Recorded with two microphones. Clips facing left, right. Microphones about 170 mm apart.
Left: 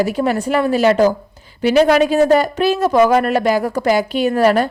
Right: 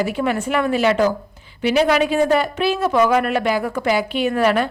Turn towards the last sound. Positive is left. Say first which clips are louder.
# left 4 dB
turn(degrees=40)  # may be behind; listen again after turning